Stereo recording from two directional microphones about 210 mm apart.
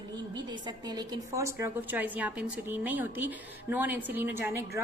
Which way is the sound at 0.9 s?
20° right (ahead or behind).